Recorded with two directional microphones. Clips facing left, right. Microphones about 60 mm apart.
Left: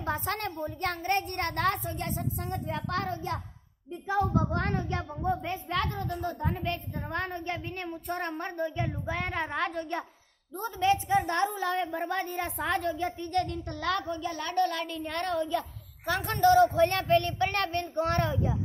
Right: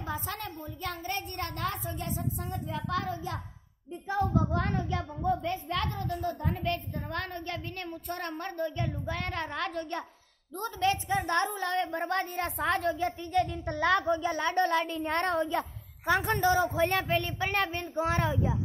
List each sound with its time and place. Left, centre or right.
0.0 s a woman's voice: left
4.1 s speech: left
5.3 s a woman's voice: left; by 15.4 s right
16.1 s a woman's voice: right
16.4 s speech: centre